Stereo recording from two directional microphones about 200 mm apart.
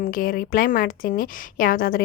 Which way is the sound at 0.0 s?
45° left (ahead or behind).